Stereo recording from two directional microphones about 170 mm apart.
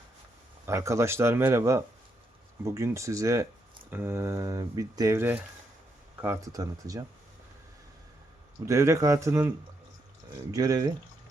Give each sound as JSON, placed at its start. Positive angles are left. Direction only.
{"t": 0.6, "sound": "speech", "side_deg": -15}
{"t": 8.6, "sound": "speech", "side_deg": -15}
{"t": 10.5, "sound": "speech", "side_deg": -20}